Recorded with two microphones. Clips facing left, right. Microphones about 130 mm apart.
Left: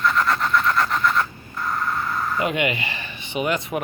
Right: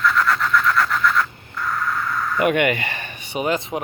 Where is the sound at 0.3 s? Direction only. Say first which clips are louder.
Right 1 dB; 30° left (ahead or behind).